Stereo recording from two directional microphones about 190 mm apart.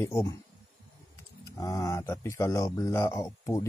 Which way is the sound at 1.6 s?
20° left (ahead or behind).